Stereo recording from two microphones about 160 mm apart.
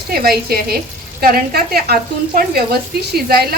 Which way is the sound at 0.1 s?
70° right (ahead or behind).